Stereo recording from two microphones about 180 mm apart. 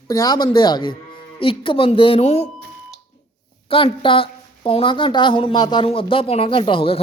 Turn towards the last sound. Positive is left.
turn(degrees=30)  # may be behind; listen again after turning